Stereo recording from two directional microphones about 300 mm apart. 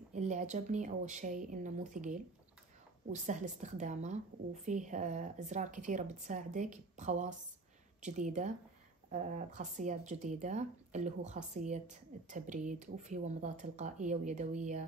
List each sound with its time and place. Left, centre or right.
0.1 s speech: right
9.6 s speech: right